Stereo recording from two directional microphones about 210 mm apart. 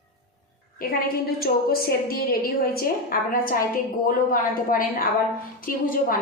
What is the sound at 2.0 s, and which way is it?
A woman's voice, 45° left (ahead or behind).